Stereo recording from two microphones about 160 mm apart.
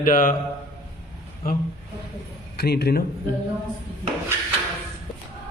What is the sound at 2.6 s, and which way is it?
Speech, 80° left.